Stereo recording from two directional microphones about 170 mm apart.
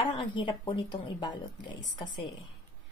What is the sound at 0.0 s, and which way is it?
Speech, 30° left (ahead or behind).